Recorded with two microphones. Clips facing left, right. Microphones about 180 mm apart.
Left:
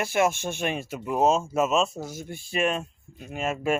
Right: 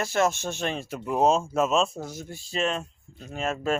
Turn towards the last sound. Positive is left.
turn(degrees=10)  # may be behind; listen again after turning